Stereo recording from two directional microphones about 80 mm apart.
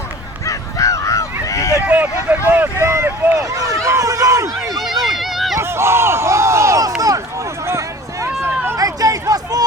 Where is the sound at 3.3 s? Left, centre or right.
Right.